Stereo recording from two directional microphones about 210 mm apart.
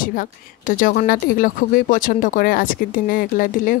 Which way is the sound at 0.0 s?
40° left (ahead or behind).